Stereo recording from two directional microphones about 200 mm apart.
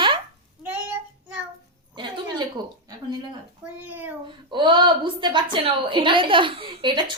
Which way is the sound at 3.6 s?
10° right (ahead or behind).